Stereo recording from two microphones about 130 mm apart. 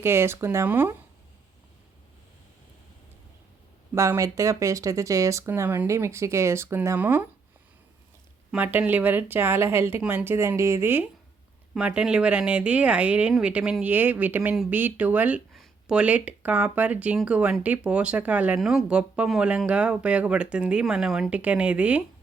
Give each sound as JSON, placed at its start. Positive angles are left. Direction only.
{"t": 0.0, "sound": "speech", "side_deg": -20}
{"t": 3.9, "sound": "speech", "side_deg": -25}
{"t": 8.5, "sound": "speech", "side_deg": -10}
{"t": 11.7, "sound": "speech", "side_deg": -10}